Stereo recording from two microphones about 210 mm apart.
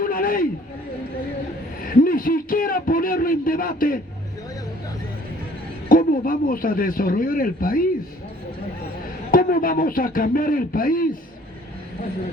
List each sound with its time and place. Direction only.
0.0 s a sound: 40° left (ahead or behind)
2.0 s a man's voice: 40° left (ahead or behind)
5.9 s a man's voice: 40° left (ahead or behind)
9.3 s a man's voice: 45° left (ahead or behind)